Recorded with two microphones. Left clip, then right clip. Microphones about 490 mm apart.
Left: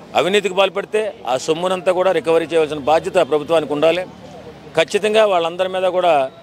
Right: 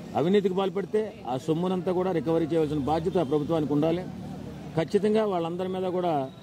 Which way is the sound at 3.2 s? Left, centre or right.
Centre.